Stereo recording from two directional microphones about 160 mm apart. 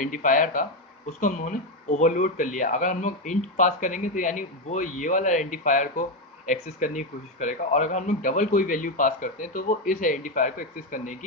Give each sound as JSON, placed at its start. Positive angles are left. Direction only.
{"t": 0.0, "sound": "speech", "side_deg": 55}